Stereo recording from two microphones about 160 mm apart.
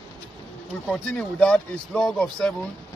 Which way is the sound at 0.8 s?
5° left (ahead or behind).